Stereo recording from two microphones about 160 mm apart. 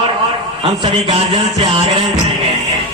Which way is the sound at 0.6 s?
35° right (ahead or behind).